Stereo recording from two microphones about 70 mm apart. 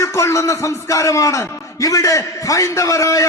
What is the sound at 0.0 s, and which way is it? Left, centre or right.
A man's voice, left.